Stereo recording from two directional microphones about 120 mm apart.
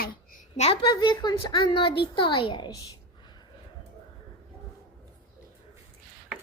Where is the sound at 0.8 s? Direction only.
40° left (ahead or behind).